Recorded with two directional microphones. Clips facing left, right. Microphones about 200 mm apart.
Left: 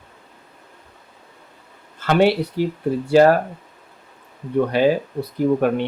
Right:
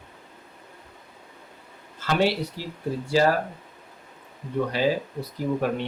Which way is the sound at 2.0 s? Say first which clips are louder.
Left 7 dB; 60° left (ahead or behind).